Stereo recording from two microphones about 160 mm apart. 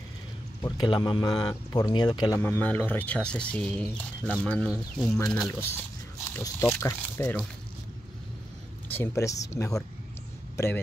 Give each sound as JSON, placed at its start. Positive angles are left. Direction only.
{"t": 0.6, "sound": "speech", "side_deg": 25}
{"t": 2.4, "sound": "speech", "side_deg": 10}
{"t": 5.5, "sound": "speech", "side_deg": 15}
{"t": 8.8, "sound": "speech", "side_deg": 15}
{"t": 10.5, "sound": "a sound", "side_deg": 15}